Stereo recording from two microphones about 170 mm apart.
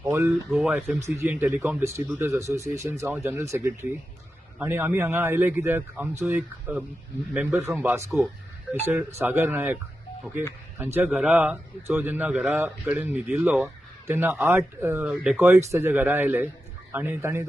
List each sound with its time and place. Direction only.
0.0 s a sound: 15° right (ahead or behind)
0.5 s speech: centre (ahead or behind)
1.2 s a man's voice: 15° right (ahead or behind)
8.1 s speech: centre (ahead or behind)
8.9 s a man's voice: 15° right (ahead or behind)
10.8 s a man's voice: 15° right (ahead or behind)
14.3 s speech: centre (ahead or behind)
14.8 s a man's voice: 15° right (ahead or behind)
15.0 s a man's voice: 5° right (ahead or behind)